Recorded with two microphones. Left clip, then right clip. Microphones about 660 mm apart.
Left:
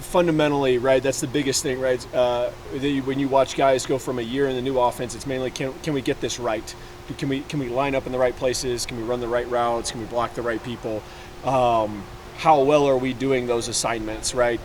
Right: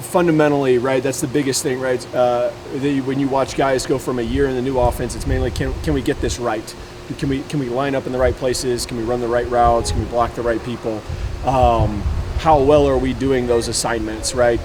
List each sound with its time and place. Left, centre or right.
0.1 s speech: left
7.8 s speech: left